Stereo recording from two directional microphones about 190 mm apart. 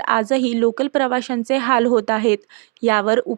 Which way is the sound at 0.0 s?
35° right (ahead or behind).